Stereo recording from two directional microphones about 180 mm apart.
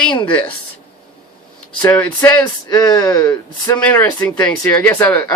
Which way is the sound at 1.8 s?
10° left (ahead or behind).